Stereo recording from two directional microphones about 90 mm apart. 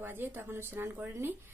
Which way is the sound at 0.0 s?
25° right (ahead or behind).